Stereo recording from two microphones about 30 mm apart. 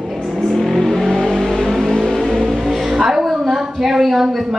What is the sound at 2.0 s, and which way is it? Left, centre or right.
Vehicle, centre.